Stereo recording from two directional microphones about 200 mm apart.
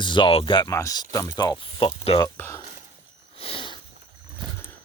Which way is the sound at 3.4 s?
30° left (ahead or behind).